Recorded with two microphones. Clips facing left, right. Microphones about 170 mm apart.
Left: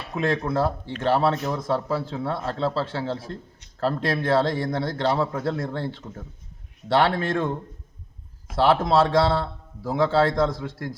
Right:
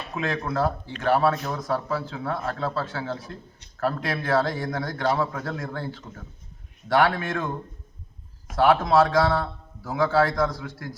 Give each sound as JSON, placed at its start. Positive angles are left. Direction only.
{"t": 0.5, "sound": "a man's voice", "side_deg": 25}
{"t": 8.5, "sound": "a man's voice", "side_deg": 25}